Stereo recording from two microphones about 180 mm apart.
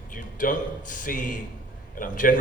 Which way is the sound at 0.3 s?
45° left (ahead or behind).